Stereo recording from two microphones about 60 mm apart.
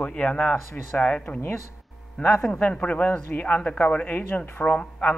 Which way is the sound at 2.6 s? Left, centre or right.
Left.